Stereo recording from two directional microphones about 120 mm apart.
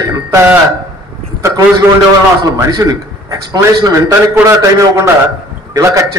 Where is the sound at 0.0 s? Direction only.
20° right (ahead or behind).